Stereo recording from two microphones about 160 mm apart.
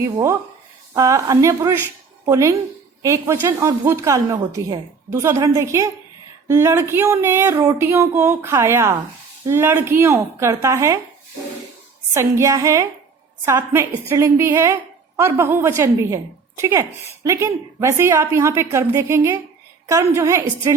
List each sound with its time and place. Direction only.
0.0 s a woman's voice: 20° right (ahead or behind)
12.1 s a woman's voice: 20° right (ahead or behind)